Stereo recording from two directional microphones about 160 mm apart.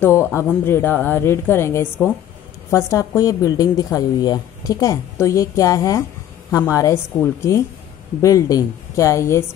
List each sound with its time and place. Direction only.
0.0 s a woman's voice: 15° left (ahead or behind)